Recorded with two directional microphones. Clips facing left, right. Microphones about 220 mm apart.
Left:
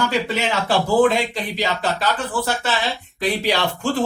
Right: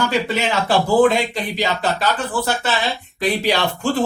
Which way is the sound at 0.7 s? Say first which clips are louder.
Right 2 dB; 40° right (ahead or behind).